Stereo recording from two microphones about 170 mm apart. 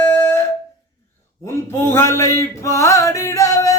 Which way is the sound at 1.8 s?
15° left (ahead or behind).